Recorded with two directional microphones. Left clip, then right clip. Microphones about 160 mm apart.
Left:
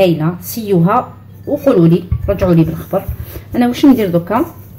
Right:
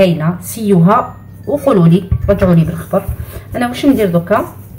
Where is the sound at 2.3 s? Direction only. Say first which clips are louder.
Left 1 dB; 40° left (ahead or behind).